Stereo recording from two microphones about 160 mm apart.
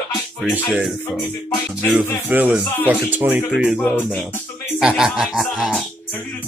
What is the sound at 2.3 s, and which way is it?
Speech, 10° right (ahead or behind).